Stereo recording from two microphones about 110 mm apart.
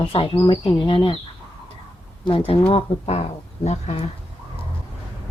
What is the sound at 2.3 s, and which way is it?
Speech, 55° left (ahead or behind).